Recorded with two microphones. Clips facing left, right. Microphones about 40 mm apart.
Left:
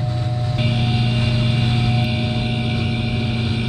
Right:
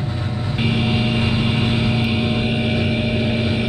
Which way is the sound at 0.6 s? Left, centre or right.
Right.